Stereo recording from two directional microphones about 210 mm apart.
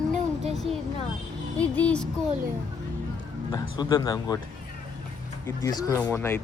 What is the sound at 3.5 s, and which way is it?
Speech, 20° left (ahead or behind).